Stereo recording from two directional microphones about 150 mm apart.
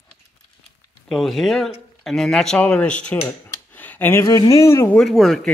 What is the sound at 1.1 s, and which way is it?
Speech, centre (ahead or behind).